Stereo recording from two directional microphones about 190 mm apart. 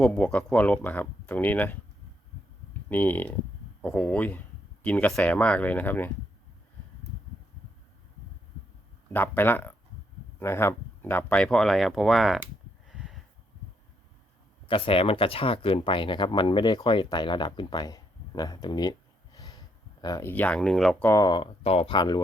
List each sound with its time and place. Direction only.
0.0 s speech: 5° left (ahead or behind)
2.9 s speech: 10° left (ahead or behind)
9.0 s speech: 10° left (ahead or behind)
12.9 s a sound: centre (ahead or behind)
14.7 s speech: 30° left (ahead or behind); by 21.1 s centre (ahead or behind)
21.1 s speech: 20° left (ahead or behind)